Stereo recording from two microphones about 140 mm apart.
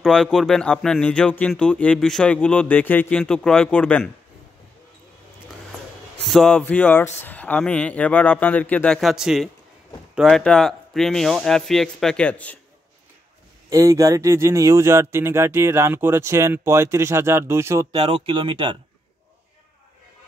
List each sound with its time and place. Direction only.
0.0 s speech: 5° left (ahead or behind)
6.2 s speech: 5° left (ahead or behind)
13.7 s speech: 25° right (ahead or behind)
17.9 s speech: 45° right (ahead or behind)